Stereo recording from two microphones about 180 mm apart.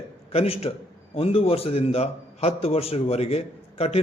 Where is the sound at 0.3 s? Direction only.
35° left (ahead or behind).